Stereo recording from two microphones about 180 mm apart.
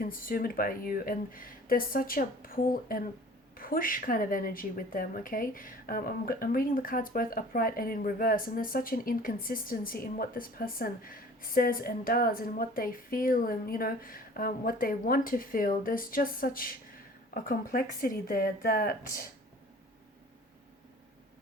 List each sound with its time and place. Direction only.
0.0 s a woman's voice: 50° left (ahead or behind)